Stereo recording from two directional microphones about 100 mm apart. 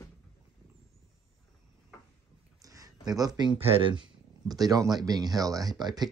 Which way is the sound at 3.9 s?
45° right (ahead or behind).